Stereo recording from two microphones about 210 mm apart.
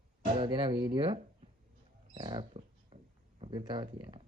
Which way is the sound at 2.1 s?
20° right (ahead or behind).